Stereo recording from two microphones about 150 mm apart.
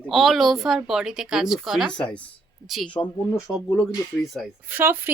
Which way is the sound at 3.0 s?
15° left (ahead or behind).